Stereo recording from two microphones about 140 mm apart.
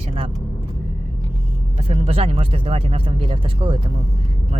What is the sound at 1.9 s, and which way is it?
Speech, 45° right (ahead or behind).